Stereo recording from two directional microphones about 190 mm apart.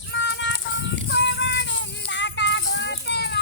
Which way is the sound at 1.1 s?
70° left (ahead or behind).